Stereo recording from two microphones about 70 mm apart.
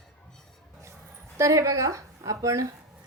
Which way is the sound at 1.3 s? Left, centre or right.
Right.